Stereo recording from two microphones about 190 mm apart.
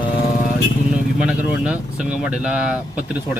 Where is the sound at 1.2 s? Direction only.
5° right (ahead or behind).